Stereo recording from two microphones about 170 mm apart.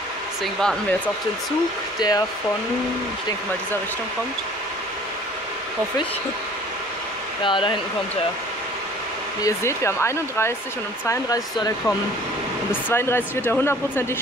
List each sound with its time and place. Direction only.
0.4 s speech: 5° left (ahead or behind)
2.0 s speech: 25° left (ahead or behind)
7.4 s speech: 30° left (ahead or behind)
9.4 s speech: 15° left (ahead or behind)
12.9 s speech: 15° left (ahead or behind)